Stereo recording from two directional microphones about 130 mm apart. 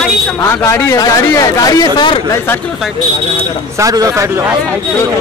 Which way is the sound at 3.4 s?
25° right (ahead or behind).